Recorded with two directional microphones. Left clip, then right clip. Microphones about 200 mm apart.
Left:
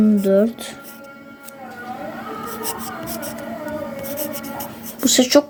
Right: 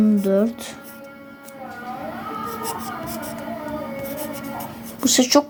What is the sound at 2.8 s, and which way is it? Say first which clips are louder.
Music: even; 45° right (ahead or behind).